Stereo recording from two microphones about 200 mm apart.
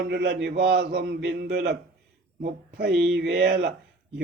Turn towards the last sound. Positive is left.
turn(degrees=-55)  # may be behind; listen again after turning